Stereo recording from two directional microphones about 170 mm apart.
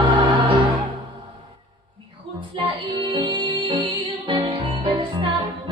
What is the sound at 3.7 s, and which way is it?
Music, 30° right (ahead or behind).